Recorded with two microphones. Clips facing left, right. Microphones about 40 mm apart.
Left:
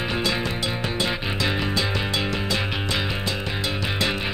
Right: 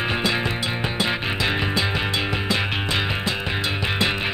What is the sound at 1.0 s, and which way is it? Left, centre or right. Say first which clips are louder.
Music: right 2 dB; right.